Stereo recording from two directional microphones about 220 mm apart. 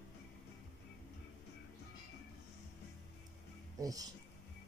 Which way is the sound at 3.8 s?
15° right (ahead or behind).